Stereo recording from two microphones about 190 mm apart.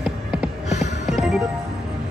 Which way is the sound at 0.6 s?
35° left (ahead or behind).